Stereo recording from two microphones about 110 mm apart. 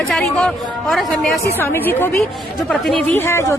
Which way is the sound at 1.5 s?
20° left (ahead or behind).